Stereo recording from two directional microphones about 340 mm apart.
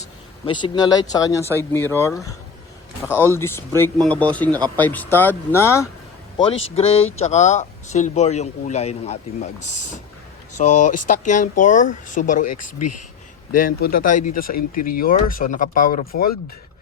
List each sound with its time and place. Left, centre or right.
0.0 s speech: centre
3.3 s a man's voice: centre; by 12.5 s left
12.6 s speech: left
13.6 s speech: left